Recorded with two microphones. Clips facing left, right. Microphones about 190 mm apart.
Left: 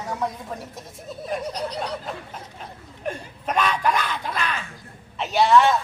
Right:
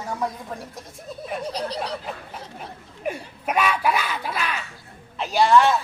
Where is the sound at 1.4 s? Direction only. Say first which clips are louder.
Right 1 dB; 30° right (ahead or behind).